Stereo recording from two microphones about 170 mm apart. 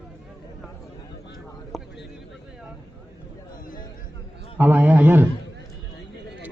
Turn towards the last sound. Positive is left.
turn(degrees=-10)  # may be behind; listen again after turning